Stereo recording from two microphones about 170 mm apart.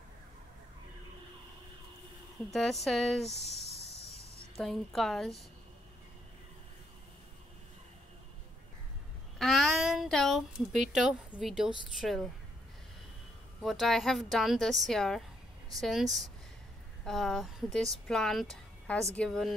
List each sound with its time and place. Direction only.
2.5 s a woman's voice: centre (ahead or behind)
3.3 s speech: 40° left (ahead or behind)
4.6 s a woman's voice: centre (ahead or behind)
9.4 s a sound: centre (ahead or behind)
10.9 s a woman's voice: 5° right (ahead or behind)
13.6 s a woman's voice: centre (ahead or behind)